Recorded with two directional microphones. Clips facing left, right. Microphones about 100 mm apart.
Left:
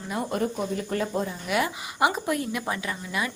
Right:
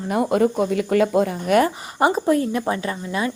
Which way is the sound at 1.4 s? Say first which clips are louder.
Right 9 dB; 45° right (ahead or behind).